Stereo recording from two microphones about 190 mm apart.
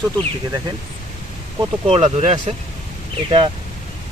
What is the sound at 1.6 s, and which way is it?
Speech, 30° right (ahead or behind).